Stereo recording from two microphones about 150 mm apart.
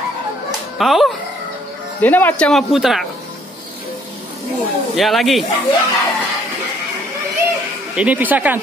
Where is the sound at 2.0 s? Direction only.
10° left (ahead or behind).